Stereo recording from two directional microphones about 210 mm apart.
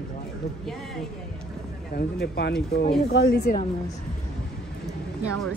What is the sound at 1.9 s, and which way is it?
Speech, 50° left (ahead or behind).